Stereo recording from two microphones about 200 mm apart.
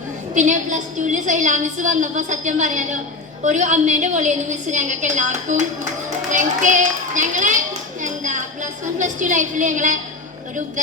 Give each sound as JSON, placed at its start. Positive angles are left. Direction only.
{"t": 0.3, "sound": "a woman's voice", "side_deg": -40}
{"t": 6.3, "sound": "children playing", "side_deg": -40}
{"t": 9.0, "sound": "a woman's voice", "side_deg": -40}